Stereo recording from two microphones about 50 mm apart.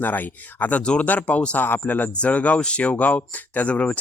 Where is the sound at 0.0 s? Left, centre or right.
Left.